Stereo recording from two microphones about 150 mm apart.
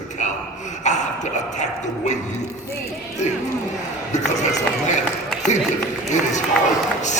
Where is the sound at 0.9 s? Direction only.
50° left (ahead or behind).